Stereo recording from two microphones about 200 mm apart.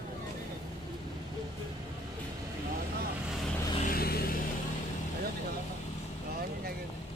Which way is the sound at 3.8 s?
50° left (ahead or behind).